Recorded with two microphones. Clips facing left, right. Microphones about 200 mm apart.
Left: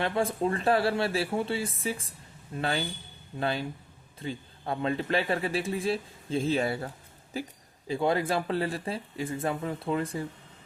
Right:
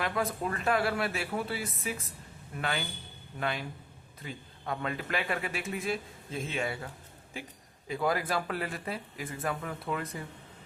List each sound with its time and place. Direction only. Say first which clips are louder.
0.0 s a man's voice: left 4 dB; 30° left (ahead or behind)
7.9 s speech: left 4 dB; 25° left (ahead or behind)